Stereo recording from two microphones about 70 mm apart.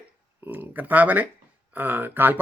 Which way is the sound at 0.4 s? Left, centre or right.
Right.